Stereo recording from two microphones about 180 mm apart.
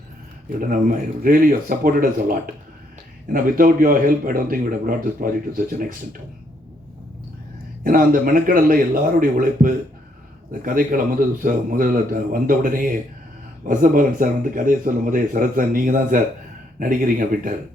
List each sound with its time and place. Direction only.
0.6 s speech: 50° right (ahead or behind)
7.9 s speech: 50° right (ahead or behind)